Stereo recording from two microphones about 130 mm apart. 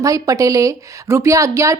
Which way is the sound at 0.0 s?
25° right (ahead or behind).